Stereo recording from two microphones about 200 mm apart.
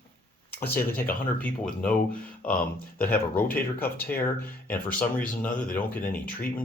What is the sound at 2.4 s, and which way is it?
Speech, 45° left (ahead or behind).